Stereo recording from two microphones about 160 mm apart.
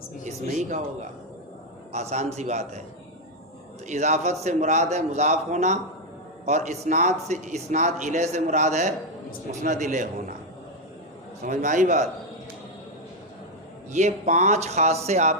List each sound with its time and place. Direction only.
0.3 s speech: 50° right (ahead or behind)
1.9 s a man's voice: 45° right (ahead or behind)
3.8 s a man's voice: 45° right (ahead or behind)
11.4 s a man's voice: 50° right (ahead or behind)
13.9 s a man's voice: 50° right (ahead or behind)